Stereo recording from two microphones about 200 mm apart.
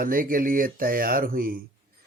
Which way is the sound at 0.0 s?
45° right (ahead or behind).